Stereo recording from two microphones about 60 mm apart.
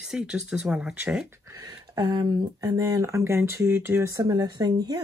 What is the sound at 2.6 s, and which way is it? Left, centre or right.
Speech, right.